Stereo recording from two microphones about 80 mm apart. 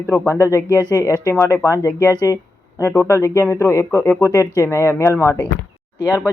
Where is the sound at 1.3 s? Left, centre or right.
Left.